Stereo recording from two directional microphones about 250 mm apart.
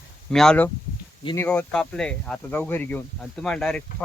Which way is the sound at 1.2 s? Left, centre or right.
Centre.